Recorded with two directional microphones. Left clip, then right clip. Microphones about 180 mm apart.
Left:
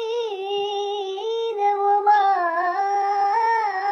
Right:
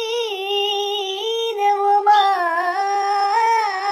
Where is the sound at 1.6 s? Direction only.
20° right (ahead or behind).